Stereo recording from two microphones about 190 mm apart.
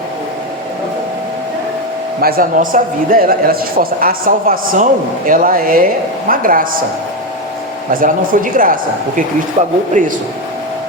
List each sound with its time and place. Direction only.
2.2 s a man's voice: 50° right (ahead or behind)
7.9 s a man's voice: 45° right (ahead or behind)